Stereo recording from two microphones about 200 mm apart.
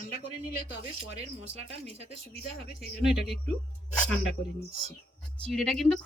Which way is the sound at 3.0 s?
Centre (ahead or behind).